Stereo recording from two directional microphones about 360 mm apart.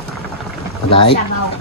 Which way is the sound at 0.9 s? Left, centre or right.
Centre.